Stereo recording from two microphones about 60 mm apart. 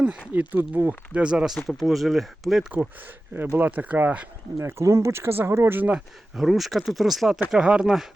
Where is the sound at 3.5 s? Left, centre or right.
Right.